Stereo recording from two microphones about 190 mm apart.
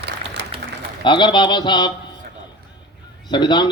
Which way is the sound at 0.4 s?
65° right (ahead or behind).